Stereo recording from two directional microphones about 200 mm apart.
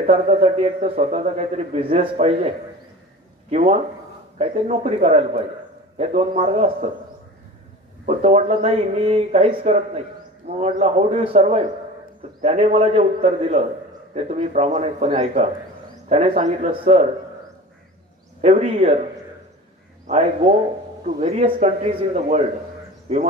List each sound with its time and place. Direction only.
0.1 s a man's voice: 30° right (ahead or behind)
8.0 s a man's voice: 35° right (ahead or behind)
18.4 s a man's voice: 35° right (ahead or behind)
21.2 s a man's voice: 35° right (ahead or behind)